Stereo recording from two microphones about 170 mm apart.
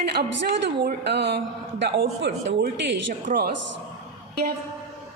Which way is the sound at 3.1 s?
55° right (ahead or behind).